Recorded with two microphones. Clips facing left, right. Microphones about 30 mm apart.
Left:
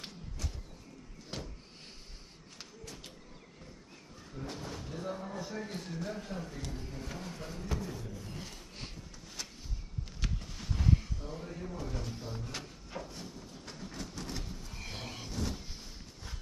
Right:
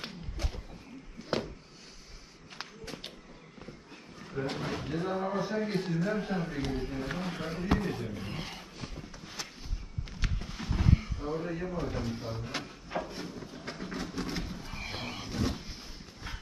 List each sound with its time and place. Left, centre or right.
0.0 s a sound: right
2.5 s run: right
4.2 s speech: right
8.9 s a sound: right
10.0 s vehicle: centre
11.4 s speech: right
11.7 s speech: right
12.0 s a sound: right
15.3 s vehicle: right
15.6 s vehicle: centre